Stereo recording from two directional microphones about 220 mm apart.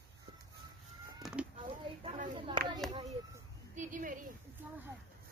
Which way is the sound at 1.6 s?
25° right (ahead or behind).